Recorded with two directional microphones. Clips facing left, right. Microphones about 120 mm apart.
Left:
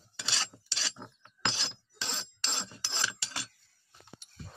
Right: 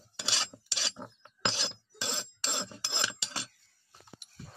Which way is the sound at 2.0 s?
10° right (ahead or behind).